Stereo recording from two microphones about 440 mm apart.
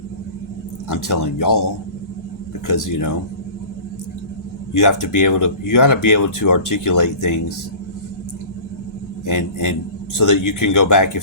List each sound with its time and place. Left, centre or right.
0.9 s speech: left
2.6 s speech: left
4.7 s speech: left
9.2 s speech: left